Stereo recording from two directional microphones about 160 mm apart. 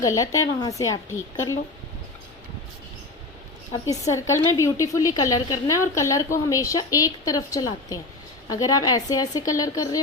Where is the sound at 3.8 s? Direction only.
20° left (ahead or behind).